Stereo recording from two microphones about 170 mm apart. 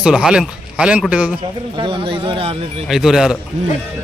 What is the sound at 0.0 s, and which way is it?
A man's voice, 5° right (ahead or behind).